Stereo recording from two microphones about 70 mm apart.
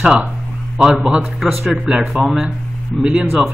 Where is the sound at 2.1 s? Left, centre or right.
Centre.